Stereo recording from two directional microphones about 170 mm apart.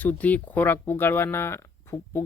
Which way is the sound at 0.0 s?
10° left (ahead or behind).